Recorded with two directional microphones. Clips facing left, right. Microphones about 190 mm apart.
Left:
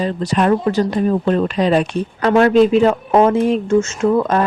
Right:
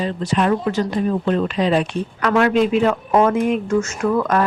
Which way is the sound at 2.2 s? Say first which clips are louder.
Left 5 dB; 30° left (ahead or behind).